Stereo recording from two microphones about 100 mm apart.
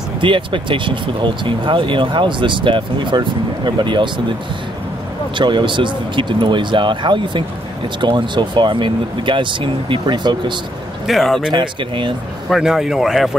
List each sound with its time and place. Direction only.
0.2 s speech: 55° right (ahead or behind)
5.4 s speech: 50° right (ahead or behind)
11.1 s speech: centre (ahead or behind)
11.5 s speech: 55° right (ahead or behind)
12.4 s speech: 5° right (ahead or behind)